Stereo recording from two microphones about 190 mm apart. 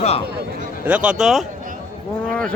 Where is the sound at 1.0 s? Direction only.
Centre (ahead or behind).